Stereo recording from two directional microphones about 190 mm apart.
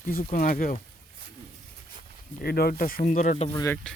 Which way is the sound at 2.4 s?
55° left (ahead or behind).